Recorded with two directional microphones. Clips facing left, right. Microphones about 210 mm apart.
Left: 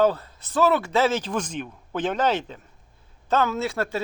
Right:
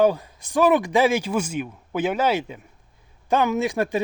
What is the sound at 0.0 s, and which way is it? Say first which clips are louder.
Speech: right 2 dB; 15° right (ahead or behind).